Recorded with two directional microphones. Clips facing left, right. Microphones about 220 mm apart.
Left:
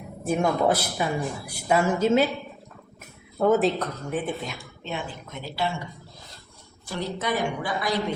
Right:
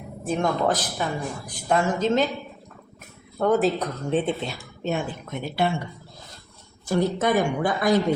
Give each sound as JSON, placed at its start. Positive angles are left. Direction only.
{"t": 0.3, "sound": "a woman's voice", "side_deg": 10}
{"t": 3.3, "sound": "speech", "side_deg": 5}
{"t": 4.1, "sound": "speech", "side_deg": -25}
{"t": 4.8, "sound": "speech", "side_deg": -45}
{"t": 6.8, "sound": "a woman's voice", "side_deg": -45}